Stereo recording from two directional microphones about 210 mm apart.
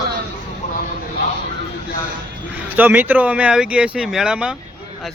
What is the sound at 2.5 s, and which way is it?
Speech, 10° right (ahead or behind).